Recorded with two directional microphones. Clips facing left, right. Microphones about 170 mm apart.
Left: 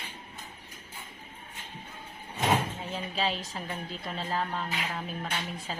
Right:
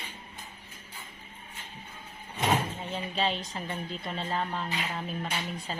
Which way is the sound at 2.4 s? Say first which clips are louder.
Even; centre (ahead or behind).